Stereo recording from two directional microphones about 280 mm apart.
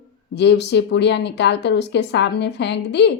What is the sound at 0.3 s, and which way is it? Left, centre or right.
Speech, left.